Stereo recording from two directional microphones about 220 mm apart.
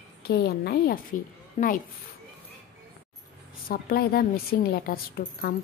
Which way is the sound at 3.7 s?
40° left (ahead or behind).